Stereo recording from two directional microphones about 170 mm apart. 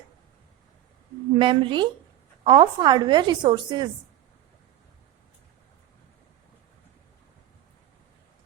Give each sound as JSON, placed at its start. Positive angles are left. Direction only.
{"t": 1.4, "sound": "a woman's voice", "side_deg": -30}